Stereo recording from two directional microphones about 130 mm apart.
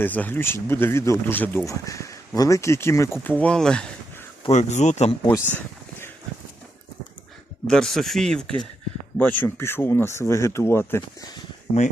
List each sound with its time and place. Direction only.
0.0 s speech: 15° left (ahead or behind)
3.4 s speech: 5° left (ahead or behind)
4.5 s speech: 65° left (ahead or behind)
5.5 s a sound: 15° left (ahead or behind)
7.7 s speech: 5° left (ahead or behind); by 11.3 s 20° left (ahead or behind)